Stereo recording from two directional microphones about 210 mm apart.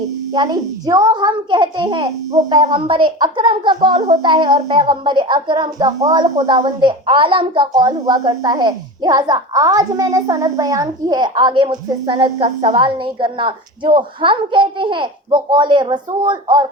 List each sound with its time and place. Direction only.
0.3 s a woman's voice: 20° right (ahead or behind)